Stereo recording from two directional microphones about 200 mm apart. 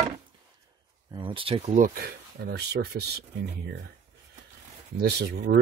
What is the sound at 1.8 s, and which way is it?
Speech, 50° right (ahead or behind).